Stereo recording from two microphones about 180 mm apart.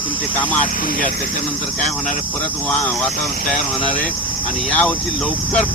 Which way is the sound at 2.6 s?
5° left (ahead or behind).